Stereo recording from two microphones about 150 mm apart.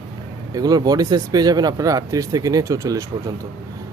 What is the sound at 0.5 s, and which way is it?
Speech, 25° right (ahead or behind).